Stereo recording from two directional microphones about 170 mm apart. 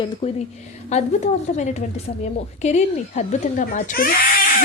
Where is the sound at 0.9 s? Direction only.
40° left (ahead or behind).